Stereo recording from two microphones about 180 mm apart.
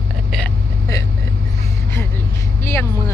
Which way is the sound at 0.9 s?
20° left (ahead or behind).